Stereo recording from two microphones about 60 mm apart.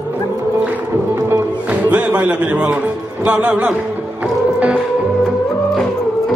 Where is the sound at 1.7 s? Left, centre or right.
Right.